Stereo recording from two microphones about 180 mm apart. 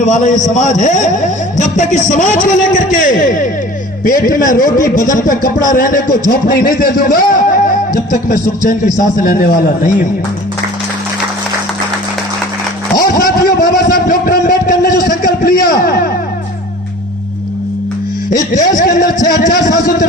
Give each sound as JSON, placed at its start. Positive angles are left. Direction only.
{"t": 0.0, "sound": "a man's voice", "side_deg": 45}
{"t": 13.0, "sound": "a sound", "side_deg": 55}
{"t": 15.6, "sound": "a man's voice", "side_deg": 55}
{"t": 18.8, "sound": "a man's voice", "side_deg": 50}